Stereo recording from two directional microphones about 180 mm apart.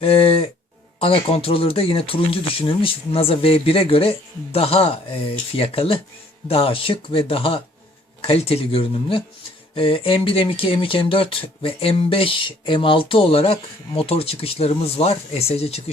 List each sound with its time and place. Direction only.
0.0 s speech: 30° left (ahead or behind)